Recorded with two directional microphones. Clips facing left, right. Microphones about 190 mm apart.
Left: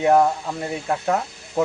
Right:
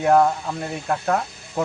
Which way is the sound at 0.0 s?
15° left (ahead or behind).